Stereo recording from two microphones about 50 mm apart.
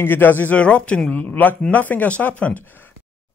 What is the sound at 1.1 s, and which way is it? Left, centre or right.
A man's voice, left.